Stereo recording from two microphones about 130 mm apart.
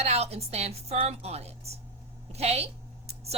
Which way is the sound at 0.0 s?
55° right (ahead or behind).